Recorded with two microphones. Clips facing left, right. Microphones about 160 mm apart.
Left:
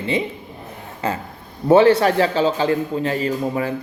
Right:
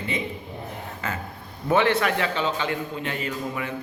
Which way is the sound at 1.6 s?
35° left (ahead or behind).